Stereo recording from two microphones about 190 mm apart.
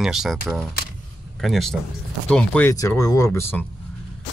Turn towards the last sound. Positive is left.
turn(degrees=10)  # may be behind; listen again after turning